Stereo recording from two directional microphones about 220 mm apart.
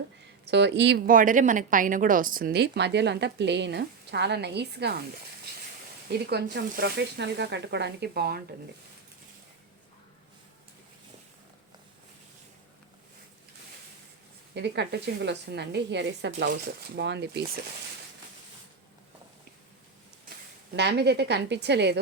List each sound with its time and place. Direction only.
0.4 s a woman's voice: 50° right (ahead or behind)
6.1 s a woman's voice: 50° right (ahead or behind)
14.5 s a woman's voice: 50° right (ahead or behind)
20.7 s a woman's voice: 50° right (ahead or behind)